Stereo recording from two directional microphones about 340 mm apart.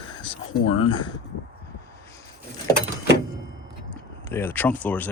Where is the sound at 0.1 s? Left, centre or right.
Centre.